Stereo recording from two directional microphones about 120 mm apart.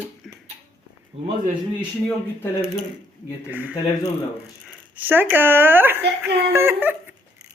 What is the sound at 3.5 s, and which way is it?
Speech, 15° right (ahead or behind).